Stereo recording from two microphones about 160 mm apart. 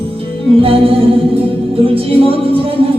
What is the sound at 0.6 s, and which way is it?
Music, 35° right (ahead or behind).